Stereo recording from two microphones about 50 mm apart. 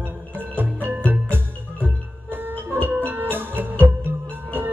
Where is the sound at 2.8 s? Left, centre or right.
Right.